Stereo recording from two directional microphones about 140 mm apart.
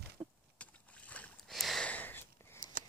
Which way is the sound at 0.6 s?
10° left (ahead or behind).